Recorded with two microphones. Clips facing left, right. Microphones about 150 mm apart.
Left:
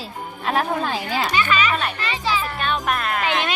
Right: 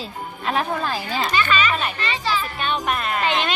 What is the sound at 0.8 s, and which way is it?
Speech, 10° left (ahead or behind).